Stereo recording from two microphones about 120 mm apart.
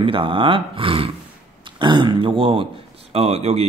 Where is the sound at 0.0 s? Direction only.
45° right (ahead or behind).